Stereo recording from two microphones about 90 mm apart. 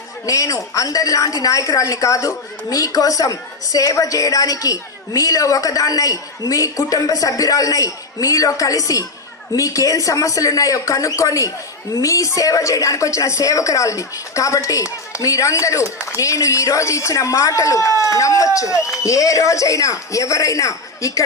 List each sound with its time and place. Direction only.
0.3 s a woman's voice: 40° left (ahead or behind)